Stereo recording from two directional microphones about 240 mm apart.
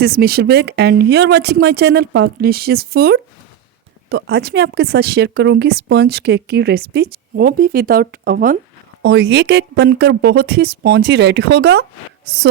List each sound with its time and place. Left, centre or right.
0.0 s speech: right